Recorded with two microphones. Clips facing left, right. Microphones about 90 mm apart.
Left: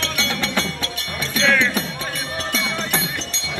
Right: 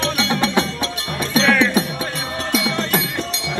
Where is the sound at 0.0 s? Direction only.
20° right (ahead or behind).